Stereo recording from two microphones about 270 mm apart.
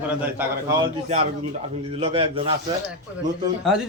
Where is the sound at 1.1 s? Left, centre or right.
Right.